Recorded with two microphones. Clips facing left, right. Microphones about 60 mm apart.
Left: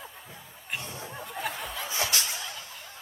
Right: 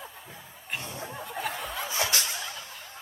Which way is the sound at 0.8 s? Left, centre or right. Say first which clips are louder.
Right 1 dB; right.